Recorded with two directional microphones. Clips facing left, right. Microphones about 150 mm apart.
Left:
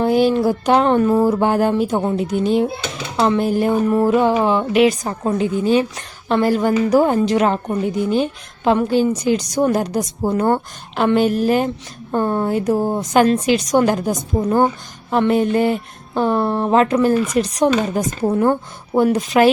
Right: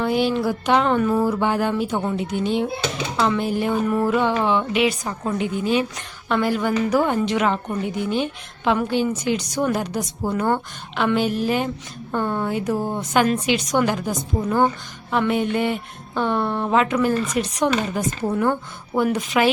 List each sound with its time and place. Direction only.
0.0 s a woman's voice: 40° left (ahead or behind)
1.3 s a woman's voice: 45° left (ahead or behind)
3.7 s a woman's voice: 30° left (ahead or behind)